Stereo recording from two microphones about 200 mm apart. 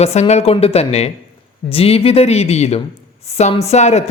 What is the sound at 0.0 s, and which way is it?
A man's voice, 35° left (ahead or behind).